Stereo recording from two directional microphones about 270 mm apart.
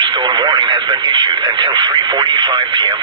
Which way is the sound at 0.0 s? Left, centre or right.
Centre.